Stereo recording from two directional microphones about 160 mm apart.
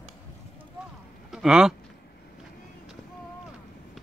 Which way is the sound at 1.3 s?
5° right (ahead or behind).